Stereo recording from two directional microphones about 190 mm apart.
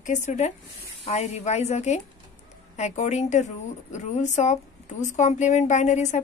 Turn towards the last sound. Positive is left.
turn(degrees=40)  # may be behind; listen again after turning